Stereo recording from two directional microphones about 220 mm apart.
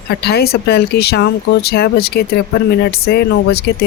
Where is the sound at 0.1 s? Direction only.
45° left (ahead or behind).